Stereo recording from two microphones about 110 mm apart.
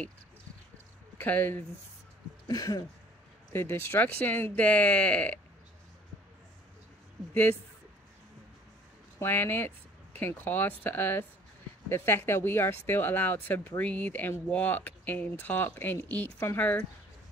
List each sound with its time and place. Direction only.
1.1 s speech: 15° left (ahead or behind)
2.4 s a sound: 35° left (ahead or behind)
3.5 s speech: 20° left (ahead or behind)
9.2 s speech: 20° left (ahead or behind)